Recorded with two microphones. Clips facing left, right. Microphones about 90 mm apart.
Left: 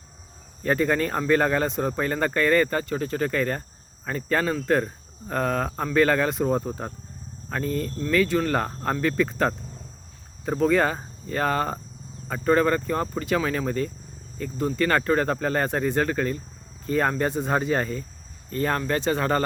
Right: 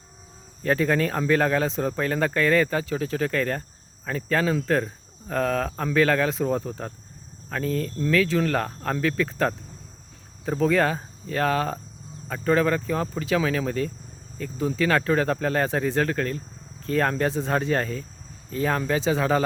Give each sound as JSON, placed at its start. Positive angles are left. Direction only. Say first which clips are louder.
{"t": 0.6, "sound": "speech", "louder": "even", "side_deg": 0}